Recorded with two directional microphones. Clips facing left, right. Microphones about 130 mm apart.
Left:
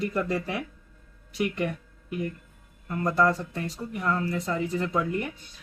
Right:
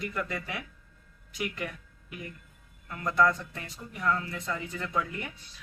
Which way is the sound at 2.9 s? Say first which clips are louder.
Left 2 dB; 40° left (ahead or behind).